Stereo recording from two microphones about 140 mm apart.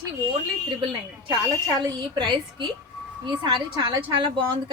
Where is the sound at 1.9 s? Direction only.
35° right (ahead or behind).